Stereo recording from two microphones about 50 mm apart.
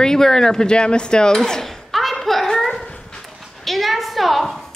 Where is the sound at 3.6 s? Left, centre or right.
Centre.